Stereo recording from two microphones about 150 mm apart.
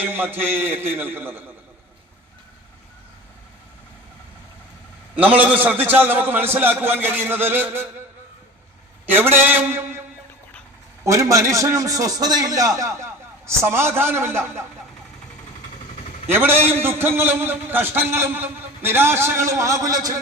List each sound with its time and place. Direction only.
0.0 s a man's voice: 15° right (ahead or behind)
5.1 s a man's voice: 10° right (ahead or behind)
9.1 s a man's voice: 15° right (ahead or behind)
11.0 s a man's voice: 20° right (ahead or behind)
16.3 s a man's voice: 15° right (ahead or behind)